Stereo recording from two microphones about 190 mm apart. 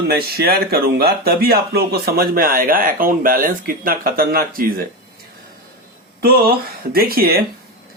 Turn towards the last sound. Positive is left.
turn(degrees=-50)  # may be behind; listen again after turning